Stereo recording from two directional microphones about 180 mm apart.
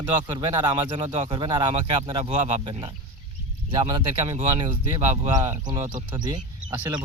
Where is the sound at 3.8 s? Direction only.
30° right (ahead or behind).